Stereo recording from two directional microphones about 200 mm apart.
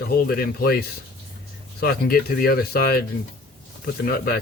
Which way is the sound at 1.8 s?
50° left (ahead or behind).